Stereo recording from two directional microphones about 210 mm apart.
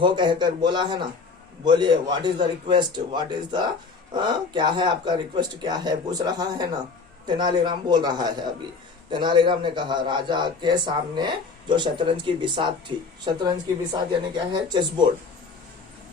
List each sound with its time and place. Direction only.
0.0 s speech: 20° right (ahead or behind)